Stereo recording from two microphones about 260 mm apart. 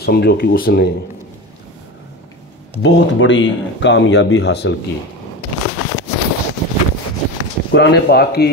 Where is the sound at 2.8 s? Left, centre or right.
Left.